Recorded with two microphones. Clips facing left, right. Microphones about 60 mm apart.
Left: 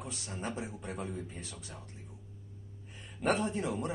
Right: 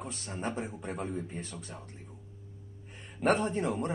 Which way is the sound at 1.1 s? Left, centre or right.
Centre.